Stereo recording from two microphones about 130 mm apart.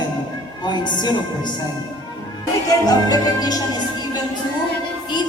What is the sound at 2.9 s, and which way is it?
Music, 30° left (ahead or behind).